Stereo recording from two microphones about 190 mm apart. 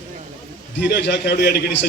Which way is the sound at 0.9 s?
60° left (ahead or behind).